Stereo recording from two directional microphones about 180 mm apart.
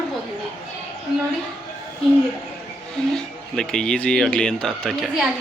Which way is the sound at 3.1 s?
5° left (ahead or behind).